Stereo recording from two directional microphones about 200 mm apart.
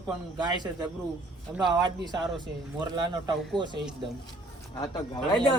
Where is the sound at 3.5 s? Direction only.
25° right (ahead or behind).